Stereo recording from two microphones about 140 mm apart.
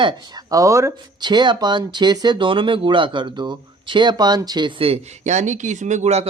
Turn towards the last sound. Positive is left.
turn(degrees=-50)  # may be behind; listen again after turning